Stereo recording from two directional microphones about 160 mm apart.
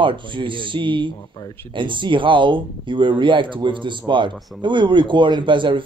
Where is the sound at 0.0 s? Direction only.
30° right (ahead or behind).